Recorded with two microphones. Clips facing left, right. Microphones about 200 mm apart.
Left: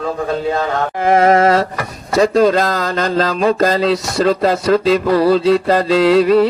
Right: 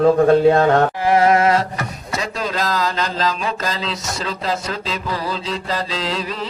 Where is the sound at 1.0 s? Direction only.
50° left (ahead or behind).